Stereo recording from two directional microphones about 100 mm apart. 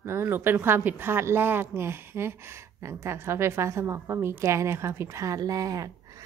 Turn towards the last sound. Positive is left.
turn(degrees=-35)  # may be behind; listen again after turning